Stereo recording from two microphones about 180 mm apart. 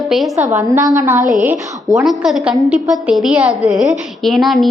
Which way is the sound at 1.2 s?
45° right (ahead or behind).